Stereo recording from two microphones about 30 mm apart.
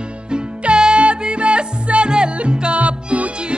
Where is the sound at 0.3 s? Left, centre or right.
Right.